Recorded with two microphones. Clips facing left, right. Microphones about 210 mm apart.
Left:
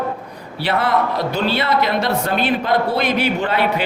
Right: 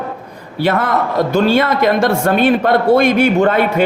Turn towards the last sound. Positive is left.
turn(degrees=-45)  # may be behind; listen again after turning